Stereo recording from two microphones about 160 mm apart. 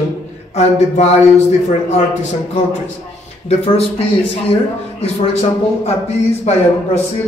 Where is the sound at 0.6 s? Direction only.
45° left (ahead or behind).